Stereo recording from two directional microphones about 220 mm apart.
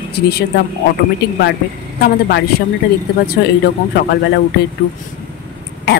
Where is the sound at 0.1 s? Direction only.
45° left (ahead or behind).